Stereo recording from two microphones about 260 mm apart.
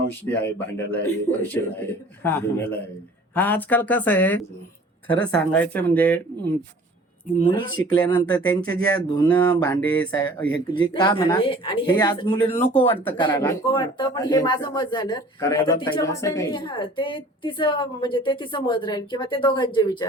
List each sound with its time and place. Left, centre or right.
0.1 s speech: centre
3.3 s speech: centre
7.3 s a woman's voice: centre
12.9 s a woman's voice: centre